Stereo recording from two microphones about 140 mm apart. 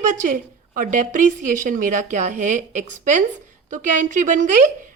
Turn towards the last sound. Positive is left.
turn(degrees=-60)  # may be behind; listen again after turning